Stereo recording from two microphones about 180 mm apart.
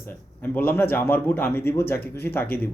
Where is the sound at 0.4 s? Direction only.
10° left (ahead or behind).